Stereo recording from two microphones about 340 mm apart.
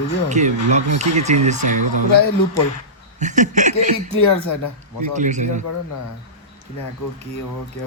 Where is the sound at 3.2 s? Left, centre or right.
Right.